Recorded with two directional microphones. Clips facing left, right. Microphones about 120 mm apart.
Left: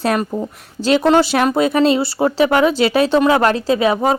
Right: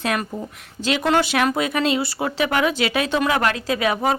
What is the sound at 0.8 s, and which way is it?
Speech, 35° left (ahead or behind).